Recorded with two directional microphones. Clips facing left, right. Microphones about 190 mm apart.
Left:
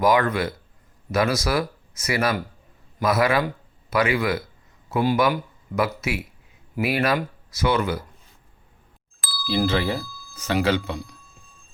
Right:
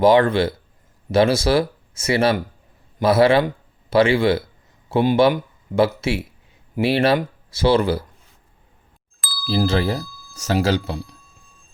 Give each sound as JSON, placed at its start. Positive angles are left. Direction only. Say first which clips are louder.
{"t": 0.0, "sound": "a man's voice", "louder": "right 5 dB", "side_deg": -30}
{"t": 9.2, "sound": "bicycle bell", "louder": "left 1 dB", "side_deg": 0}
{"t": 9.5, "sound": "speech", "louder": "right 2 dB", "side_deg": -40}